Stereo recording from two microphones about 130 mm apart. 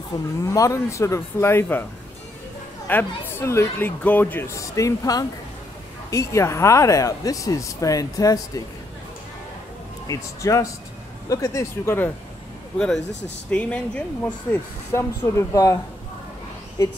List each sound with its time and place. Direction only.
0.4 s speech: 25° left (ahead or behind)
2.9 s speech: 15° left (ahead or behind)
10.0 s speech: 25° left (ahead or behind)
12.7 s speech: 5° left (ahead or behind)
14.5 s speech: 20° left (ahead or behind)